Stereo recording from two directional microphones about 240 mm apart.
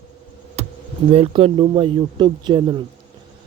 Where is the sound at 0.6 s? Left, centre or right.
Right.